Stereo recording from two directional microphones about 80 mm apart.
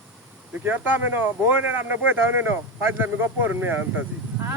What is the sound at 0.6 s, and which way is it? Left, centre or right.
Speech, right.